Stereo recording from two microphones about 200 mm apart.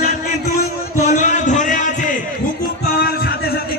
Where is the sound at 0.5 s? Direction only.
35° left (ahead or behind).